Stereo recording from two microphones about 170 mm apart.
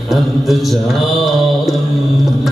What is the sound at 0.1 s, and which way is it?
Mantra, centre (ahead or behind).